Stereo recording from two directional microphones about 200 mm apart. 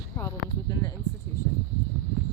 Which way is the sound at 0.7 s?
20° left (ahead or behind).